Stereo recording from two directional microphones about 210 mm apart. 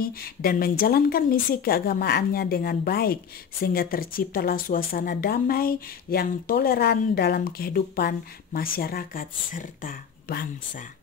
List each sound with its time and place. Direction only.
0.0 s a woman's voice: 45° left (ahead or behind)